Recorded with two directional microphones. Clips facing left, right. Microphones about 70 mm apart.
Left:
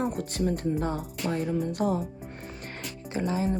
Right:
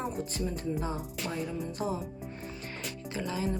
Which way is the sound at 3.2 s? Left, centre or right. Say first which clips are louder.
Left 5 dB; left.